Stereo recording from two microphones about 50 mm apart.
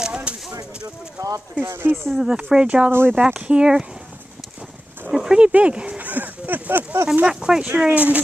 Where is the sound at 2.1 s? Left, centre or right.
Centre.